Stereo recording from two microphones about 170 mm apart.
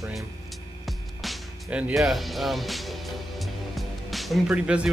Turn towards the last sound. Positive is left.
turn(degrees=-5)  # may be behind; listen again after turning